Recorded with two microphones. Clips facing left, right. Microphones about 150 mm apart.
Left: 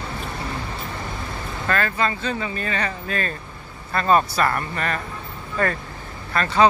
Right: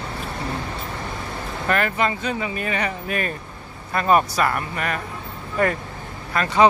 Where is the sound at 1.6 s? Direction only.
20° right (ahead or behind).